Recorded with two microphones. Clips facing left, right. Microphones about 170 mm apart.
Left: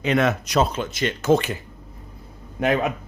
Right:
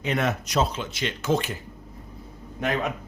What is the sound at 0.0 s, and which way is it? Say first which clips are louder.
Speech: left 5 dB; 90° left.